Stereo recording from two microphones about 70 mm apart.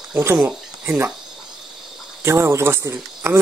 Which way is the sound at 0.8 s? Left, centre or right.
Right.